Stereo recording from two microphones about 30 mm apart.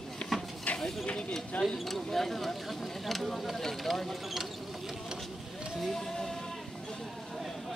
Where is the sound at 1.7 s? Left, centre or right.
Centre.